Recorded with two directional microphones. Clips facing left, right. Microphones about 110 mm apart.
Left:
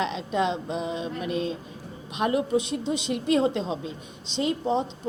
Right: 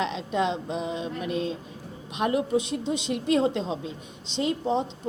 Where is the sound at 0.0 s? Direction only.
15° left (ahead or behind).